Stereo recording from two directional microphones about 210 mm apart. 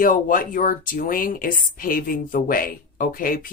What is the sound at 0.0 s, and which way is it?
Speech, 40° left (ahead or behind).